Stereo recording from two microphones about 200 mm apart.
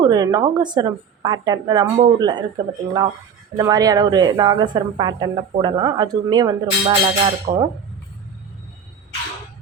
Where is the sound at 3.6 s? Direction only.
20° right (ahead or behind).